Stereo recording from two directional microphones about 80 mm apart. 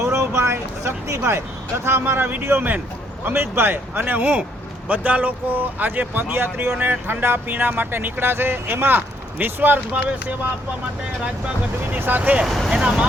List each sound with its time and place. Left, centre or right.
0.0 s speech: right
11.9 s speech: right
12.5 s speech: centre
12.7 s speech: centre